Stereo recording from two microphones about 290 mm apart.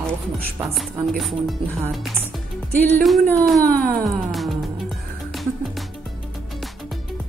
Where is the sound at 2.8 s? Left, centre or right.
Centre.